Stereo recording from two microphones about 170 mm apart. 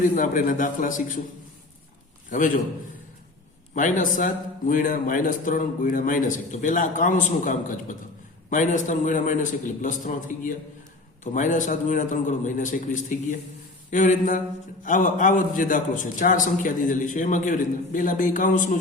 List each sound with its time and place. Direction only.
0.2 s a man's voice: 50° left (ahead or behind)
3.8 s a man's voice: 50° left (ahead or behind)